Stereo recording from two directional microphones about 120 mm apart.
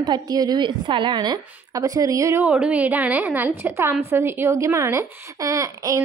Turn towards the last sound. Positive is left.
turn(degrees=-25)  # may be behind; listen again after turning